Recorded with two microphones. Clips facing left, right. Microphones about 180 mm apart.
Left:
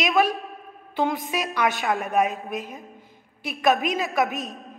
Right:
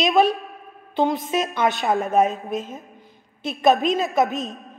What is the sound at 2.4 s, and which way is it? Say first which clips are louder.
Speech: right 4 dB; 20° right (ahead or behind).